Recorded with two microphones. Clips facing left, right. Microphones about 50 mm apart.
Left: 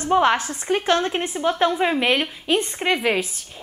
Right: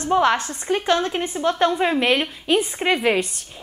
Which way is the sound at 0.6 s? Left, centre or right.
Centre.